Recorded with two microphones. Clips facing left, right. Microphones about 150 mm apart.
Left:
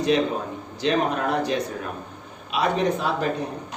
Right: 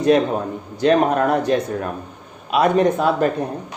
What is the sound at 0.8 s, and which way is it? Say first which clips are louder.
Speech: right 7 dB; 50° right (ahead or behind).